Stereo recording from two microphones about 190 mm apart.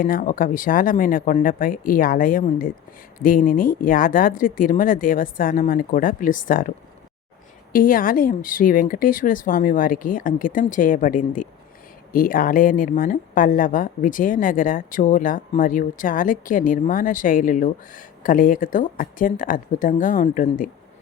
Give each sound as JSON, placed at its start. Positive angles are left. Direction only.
{"t": 0.0, "sound": "speech", "side_deg": 45}